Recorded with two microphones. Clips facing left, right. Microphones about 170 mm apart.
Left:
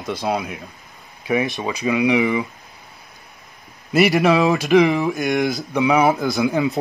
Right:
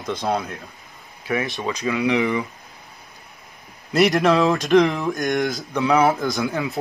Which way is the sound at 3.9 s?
5° left (ahead or behind).